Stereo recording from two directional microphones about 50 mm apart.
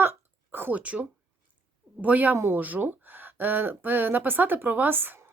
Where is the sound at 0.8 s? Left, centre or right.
Right.